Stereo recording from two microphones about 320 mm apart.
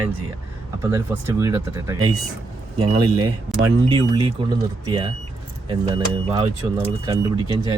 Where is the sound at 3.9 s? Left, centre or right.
Centre.